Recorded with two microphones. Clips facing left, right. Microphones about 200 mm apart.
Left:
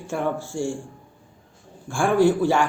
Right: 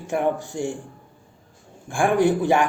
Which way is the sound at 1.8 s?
15° right (ahead or behind).